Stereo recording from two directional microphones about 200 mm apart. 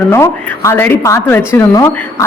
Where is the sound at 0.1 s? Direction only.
15° left (ahead or behind).